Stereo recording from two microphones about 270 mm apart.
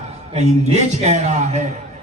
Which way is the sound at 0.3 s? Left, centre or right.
Right.